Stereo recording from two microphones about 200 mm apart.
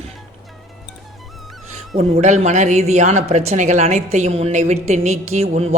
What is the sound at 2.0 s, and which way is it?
Speech, 30° right (ahead or behind).